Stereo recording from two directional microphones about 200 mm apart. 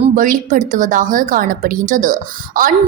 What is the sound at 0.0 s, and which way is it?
A woman's voice, 40° right (ahead or behind).